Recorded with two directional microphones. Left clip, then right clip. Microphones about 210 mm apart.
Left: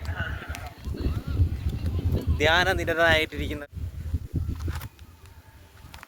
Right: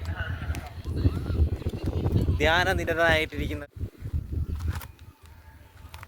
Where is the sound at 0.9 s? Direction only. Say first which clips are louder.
Right 3 dB; 50° right (ahead or behind).